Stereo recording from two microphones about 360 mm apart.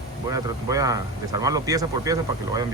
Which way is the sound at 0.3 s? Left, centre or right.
Centre.